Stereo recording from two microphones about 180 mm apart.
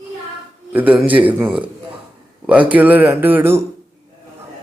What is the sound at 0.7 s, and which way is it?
A man's voice, 10° right (ahead or behind).